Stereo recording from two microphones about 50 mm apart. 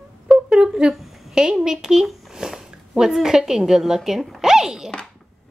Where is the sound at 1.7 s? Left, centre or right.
Centre.